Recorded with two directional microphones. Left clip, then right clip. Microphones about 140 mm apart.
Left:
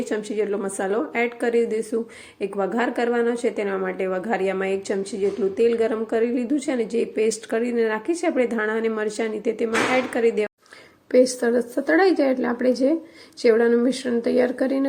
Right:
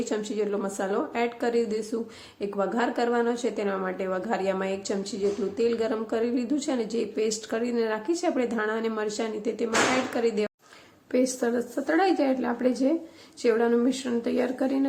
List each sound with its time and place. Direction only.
0.0 s a woman's voice: 20° left (ahead or behind)
11.1 s a woman's voice: 30° left (ahead or behind)